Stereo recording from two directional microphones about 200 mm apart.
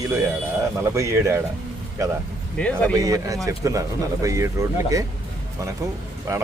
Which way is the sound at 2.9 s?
15° right (ahead or behind).